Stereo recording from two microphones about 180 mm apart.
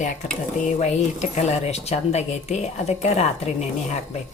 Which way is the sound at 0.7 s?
40° left (ahead or behind).